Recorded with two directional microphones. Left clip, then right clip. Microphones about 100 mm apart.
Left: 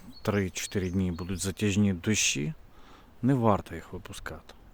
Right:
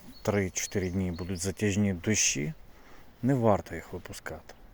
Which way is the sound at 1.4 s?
45° left (ahead or behind).